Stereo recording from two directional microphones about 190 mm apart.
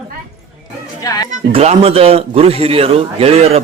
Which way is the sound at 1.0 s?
20° left (ahead or behind).